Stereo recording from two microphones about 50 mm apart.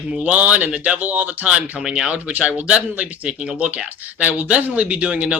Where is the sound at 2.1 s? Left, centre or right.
Right.